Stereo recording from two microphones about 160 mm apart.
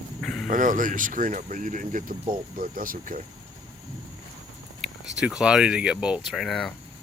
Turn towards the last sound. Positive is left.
turn(degrees=0)  # may be behind; listen again after turning